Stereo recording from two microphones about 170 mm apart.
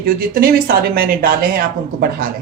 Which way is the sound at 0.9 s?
60° right (ahead or behind).